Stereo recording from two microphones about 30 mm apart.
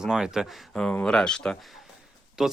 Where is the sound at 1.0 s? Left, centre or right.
Left.